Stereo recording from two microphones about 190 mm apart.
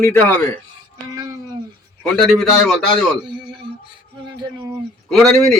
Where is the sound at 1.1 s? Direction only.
20° right (ahead or behind).